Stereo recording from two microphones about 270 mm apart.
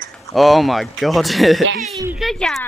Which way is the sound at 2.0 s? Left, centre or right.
Centre.